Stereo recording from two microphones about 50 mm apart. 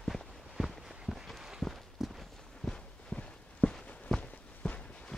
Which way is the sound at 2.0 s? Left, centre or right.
Centre.